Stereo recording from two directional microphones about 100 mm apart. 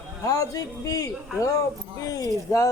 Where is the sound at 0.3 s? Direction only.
35° left (ahead or behind).